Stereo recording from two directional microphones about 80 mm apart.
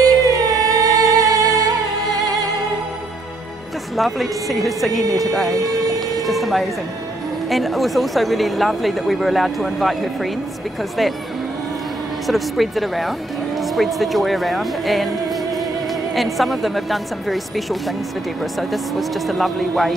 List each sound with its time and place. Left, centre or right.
0.0 s music: right
3.9 s speech: centre
5.0 s speech: right
6.2 s speech: centre
12.3 s speech: centre